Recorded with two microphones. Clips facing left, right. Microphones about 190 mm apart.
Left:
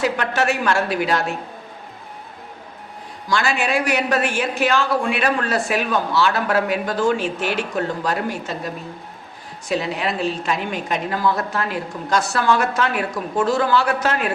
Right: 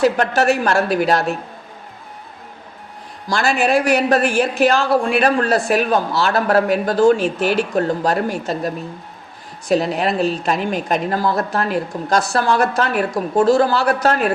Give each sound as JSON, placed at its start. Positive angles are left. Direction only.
{"t": 0.0, "sound": "a woman's voice", "side_deg": -40}
{"t": 3.2, "sound": "a woman's voice", "side_deg": -40}